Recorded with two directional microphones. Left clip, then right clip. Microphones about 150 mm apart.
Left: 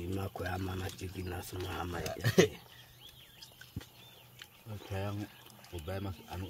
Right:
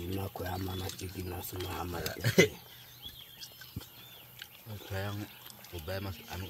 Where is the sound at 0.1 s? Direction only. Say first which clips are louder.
Even; 10° left (ahead or behind).